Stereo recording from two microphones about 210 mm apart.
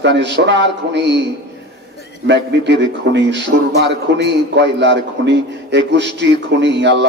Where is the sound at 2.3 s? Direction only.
55° right (ahead or behind).